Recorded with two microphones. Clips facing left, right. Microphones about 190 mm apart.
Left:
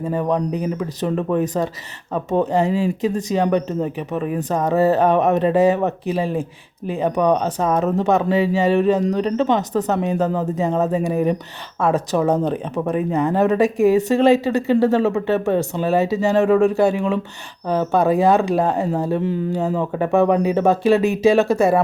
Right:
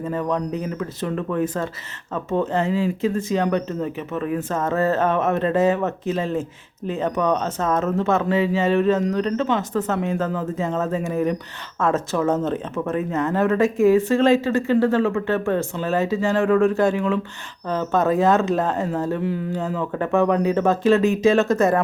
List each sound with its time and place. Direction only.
0.0 s speech: 15° left (ahead or behind)